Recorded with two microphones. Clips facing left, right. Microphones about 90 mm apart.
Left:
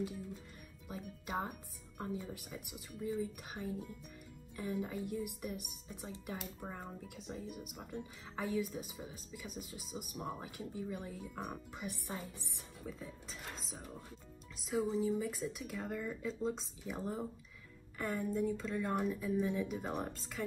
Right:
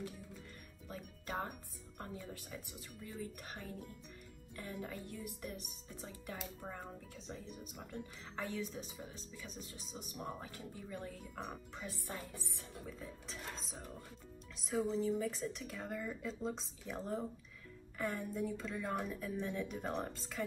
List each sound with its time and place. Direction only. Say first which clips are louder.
0.8 s music: left 2 dB; 10° left (ahead or behind)
2.1 s speech: left 3 dB; 15° left (ahead or behind)
11.8 s speech: left 2 dB; 20° left (ahead or behind)
12.8 s speech: left 4 dB; centre (ahead or behind)